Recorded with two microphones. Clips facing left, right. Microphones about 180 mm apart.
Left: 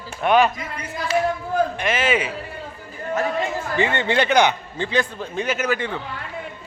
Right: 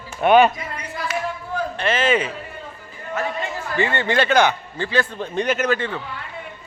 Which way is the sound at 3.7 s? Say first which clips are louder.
Right 1 dB; 20° left (ahead or behind).